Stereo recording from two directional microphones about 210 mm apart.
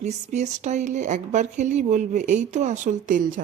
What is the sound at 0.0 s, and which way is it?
Speech, 35° right (ahead or behind).